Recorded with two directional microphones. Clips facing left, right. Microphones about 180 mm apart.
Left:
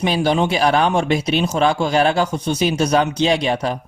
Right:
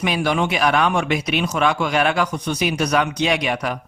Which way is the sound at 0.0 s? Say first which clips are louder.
Left 3 dB; 30° left (ahead or behind).